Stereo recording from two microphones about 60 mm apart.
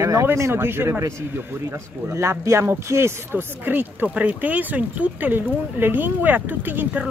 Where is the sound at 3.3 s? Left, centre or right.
Right.